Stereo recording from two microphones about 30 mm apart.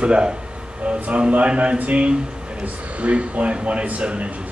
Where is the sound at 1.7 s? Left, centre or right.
Right.